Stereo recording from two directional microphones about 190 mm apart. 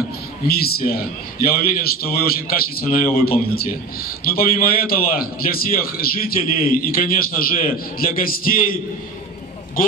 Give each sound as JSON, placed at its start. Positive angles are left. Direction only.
{"t": 0.5, "sound": "a man's voice", "side_deg": 55}